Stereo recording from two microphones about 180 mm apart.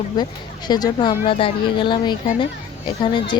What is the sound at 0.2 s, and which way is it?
Speech, 25° left (ahead or behind).